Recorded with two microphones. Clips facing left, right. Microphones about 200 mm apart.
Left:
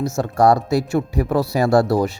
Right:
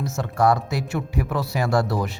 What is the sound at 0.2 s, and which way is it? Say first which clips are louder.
Speech: left 4 dB; 35° left (ahead or behind).